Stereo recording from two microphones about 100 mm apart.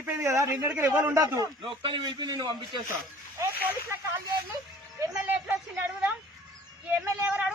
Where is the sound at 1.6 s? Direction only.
60° right (ahead or behind).